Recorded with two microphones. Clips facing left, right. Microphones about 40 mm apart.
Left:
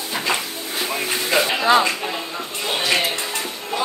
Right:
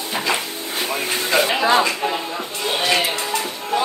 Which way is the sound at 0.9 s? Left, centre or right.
Centre.